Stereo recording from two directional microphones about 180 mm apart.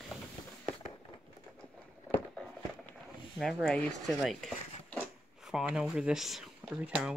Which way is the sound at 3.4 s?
Centre (ahead or behind).